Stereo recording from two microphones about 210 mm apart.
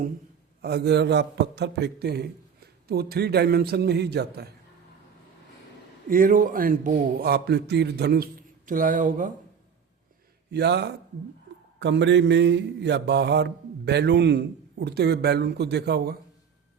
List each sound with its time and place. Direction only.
0.6 s mantra: 50° right (ahead or behind)
6.1 s a man's voice: 40° right (ahead or behind)
10.5 s mantra: 50° right (ahead or behind)